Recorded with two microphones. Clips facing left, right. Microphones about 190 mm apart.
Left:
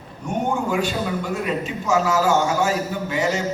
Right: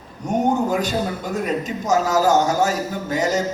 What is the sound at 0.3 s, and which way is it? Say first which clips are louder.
A man's voice: right 4 dB; 40° right (ahead or behind).